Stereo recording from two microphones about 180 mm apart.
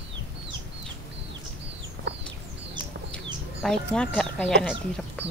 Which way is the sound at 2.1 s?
85° right.